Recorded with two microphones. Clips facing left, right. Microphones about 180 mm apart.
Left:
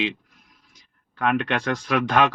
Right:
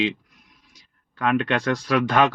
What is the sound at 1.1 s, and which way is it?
Speech, 55° left (ahead or behind).